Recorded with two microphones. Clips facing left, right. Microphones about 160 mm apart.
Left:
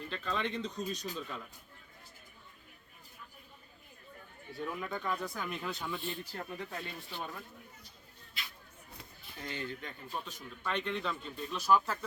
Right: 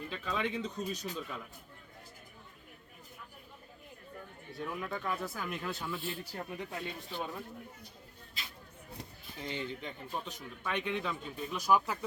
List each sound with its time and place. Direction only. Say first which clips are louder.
0.1 s speech: even; 10° right (ahead or behind)
4.5 s speech: even; centre (ahead or behind); by 7.4 s 15° right (ahead or behind)
9.4 s speech: right 2 dB; 20° right (ahead or behind)